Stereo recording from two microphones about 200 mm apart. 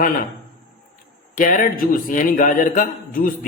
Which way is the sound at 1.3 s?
40° left (ahead or behind).